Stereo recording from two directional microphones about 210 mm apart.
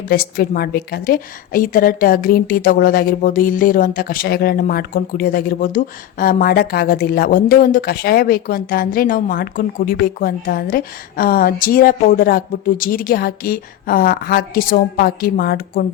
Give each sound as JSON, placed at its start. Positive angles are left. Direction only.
{"t": 0.1, "sound": "a woman's voice", "side_deg": 45}